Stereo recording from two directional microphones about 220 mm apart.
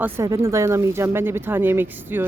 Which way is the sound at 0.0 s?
15° right (ahead or behind).